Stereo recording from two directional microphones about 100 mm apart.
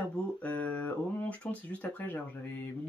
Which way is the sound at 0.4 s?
15° left (ahead or behind).